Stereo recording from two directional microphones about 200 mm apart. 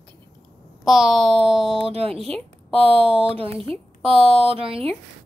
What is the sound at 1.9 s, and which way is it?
Speech, 30° right (ahead or behind).